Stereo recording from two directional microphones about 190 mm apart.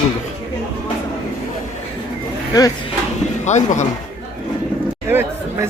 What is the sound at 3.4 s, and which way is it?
Speech, 40° left (ahead or behind).